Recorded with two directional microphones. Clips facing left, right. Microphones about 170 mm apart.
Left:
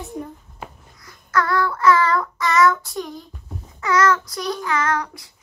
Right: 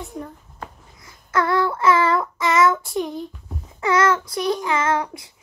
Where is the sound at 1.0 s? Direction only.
25° right (ahead or behind).